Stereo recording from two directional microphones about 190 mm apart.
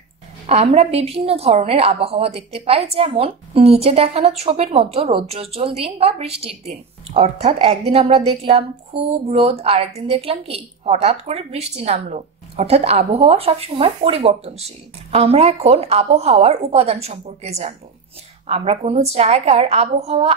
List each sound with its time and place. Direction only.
0.5 s a woman's voice: 35° right (ahead or behind)